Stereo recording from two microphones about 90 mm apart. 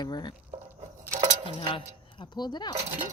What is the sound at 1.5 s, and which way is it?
Speech, 70° left (ahead or behind).